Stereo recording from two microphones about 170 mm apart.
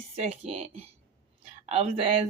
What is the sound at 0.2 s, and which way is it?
Speech, 40° right (ahead or behind).